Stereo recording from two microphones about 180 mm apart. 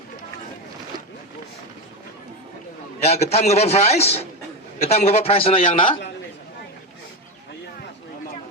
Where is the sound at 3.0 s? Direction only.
35° left (ahead or behind).